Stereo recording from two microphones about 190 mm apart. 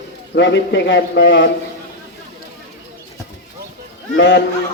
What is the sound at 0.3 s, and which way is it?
A man's voice, 70° left (ahead or behind).